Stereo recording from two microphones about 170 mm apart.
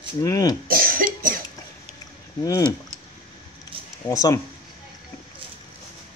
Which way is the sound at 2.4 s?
20° left (ahead or behind).